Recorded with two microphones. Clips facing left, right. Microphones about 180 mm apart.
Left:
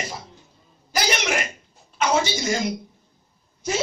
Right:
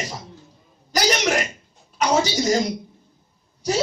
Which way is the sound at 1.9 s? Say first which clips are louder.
Right 2 dB; 40° right (ahead or behind).